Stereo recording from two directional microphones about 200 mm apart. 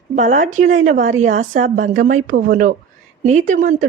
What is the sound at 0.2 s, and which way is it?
A woman's voice, 40° right (ahead or behind).